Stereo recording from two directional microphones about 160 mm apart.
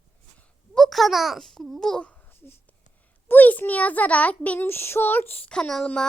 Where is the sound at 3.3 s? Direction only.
10° left (ahead or behind).